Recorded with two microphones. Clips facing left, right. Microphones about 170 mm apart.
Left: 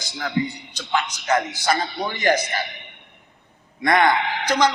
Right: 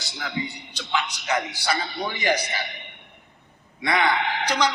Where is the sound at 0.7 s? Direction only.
45° left (ahead or behind).